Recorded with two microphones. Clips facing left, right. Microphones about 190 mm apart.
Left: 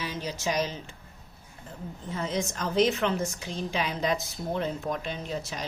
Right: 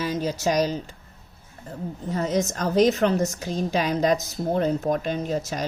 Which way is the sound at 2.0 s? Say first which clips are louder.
Right 6 dB; 40° right (ahead or behind).